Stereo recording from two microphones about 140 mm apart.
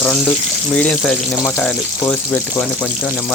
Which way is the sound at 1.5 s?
20° left (ahead or behind).